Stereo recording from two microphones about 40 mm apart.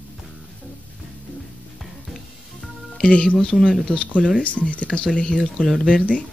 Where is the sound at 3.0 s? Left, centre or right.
Left.